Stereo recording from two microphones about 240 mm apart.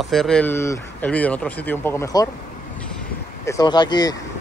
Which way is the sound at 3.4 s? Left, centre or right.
Centre.